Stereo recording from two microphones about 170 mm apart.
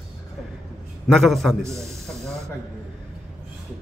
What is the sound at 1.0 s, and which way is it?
Speech, centre (ahead or behind).